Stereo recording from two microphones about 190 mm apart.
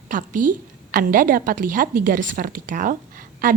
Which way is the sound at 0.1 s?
45° right (ahead or behind).